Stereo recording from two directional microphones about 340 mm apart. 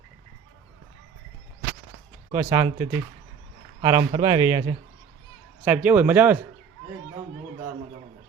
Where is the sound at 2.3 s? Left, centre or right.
Centre.